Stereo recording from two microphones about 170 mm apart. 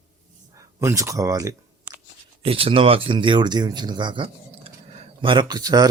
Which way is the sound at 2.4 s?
35° right (ahead or behind).